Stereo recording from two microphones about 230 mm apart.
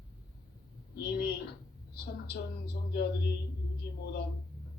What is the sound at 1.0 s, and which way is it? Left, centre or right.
A woman's voice, left.